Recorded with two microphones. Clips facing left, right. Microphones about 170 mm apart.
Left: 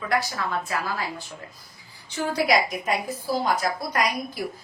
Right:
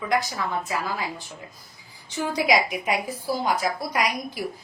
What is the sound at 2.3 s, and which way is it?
A woman's voice, 15° right (ahead or behind).